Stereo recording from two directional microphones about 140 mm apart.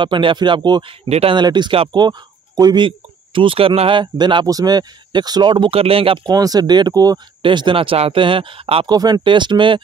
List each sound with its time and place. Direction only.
0.0 s speech: 35° right (ahead or behind)
1.0 s speech: 50° right (ahead or behind)
1.3 s speech: 35° right (ahead or behind)
8.8 s speech: 30° right (ahead or behind)